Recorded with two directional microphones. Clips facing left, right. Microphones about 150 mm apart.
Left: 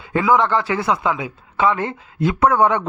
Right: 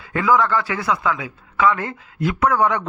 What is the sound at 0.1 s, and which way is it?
Speech, 25° left (ahead or behind).